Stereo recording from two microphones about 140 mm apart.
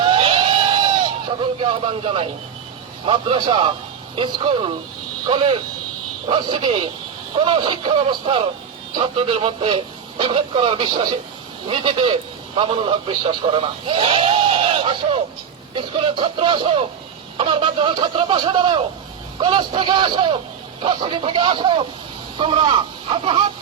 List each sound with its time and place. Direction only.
0.0 s vehicle: 40° right (ahead or behind)
1.6 s speech: 40° right (ahead or behind)